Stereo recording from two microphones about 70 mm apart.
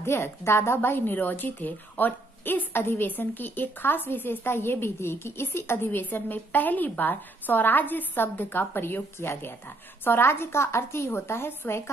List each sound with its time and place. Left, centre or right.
0.0 s a woman's voice: left